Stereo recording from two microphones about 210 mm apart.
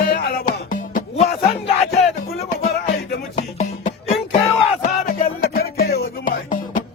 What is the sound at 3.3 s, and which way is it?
Music, 35° left (ahead or behind).